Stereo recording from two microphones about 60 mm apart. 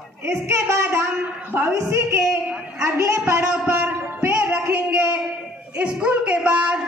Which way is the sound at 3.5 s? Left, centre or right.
Centre.